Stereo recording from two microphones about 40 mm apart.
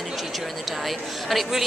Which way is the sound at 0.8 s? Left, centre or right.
Centre.